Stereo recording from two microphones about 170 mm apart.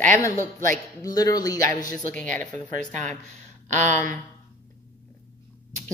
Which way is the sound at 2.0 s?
50° right (ahead or behind).